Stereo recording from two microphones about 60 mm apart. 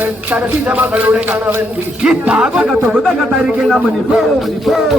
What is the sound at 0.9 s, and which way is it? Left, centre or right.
Speech, right.